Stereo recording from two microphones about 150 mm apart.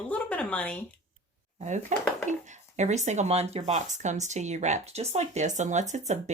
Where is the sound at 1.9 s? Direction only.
55° right (ahead or behind).